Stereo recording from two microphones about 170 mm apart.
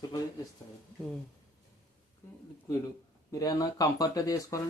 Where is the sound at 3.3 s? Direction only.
20° left (ahead or behind).